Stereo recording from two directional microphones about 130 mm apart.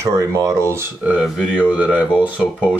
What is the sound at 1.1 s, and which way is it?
Speech, 10° right (ahead or behind).